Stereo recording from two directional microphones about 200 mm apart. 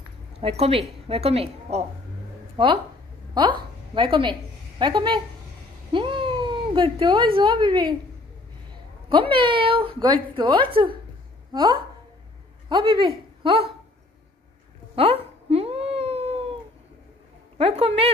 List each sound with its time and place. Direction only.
0.3 s a woman's voice: 30° right (ahead or behind)
9.1 s a woman's voice: 25° right (ahead or behind)
15.0 s cat: 30° right (ahead or behind)
17.6 s speech: 30° right (ahead or behind)